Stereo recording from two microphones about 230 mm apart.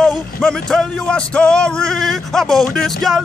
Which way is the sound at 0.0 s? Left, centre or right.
Centre.